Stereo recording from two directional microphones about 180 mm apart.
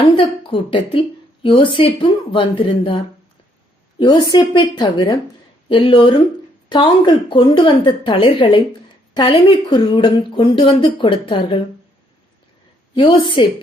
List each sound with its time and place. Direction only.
0.0 s a woman's voice: 30° left (ahead or behind)
4.0 s a woman's voice: 25° left (ahead or behind)
12.9 s a woman's voice: 25° left (ahead or behind)